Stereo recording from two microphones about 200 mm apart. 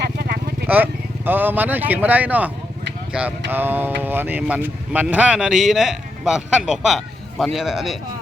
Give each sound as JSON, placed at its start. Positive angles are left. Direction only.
{"t": 0.2, "sound": "vehicle", "side_deg": -50}
{"t": 0.7, "sound": "speech", "side_deg": -10}